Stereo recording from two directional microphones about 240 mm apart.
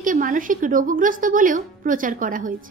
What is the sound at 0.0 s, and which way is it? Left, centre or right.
A woman's voice, right.